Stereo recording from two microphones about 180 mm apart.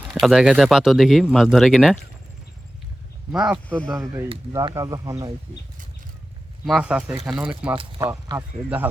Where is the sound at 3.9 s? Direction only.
15° right (ahead or behind).